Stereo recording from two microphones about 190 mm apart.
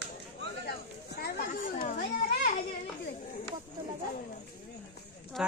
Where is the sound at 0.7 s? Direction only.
55° left (ahead or behind).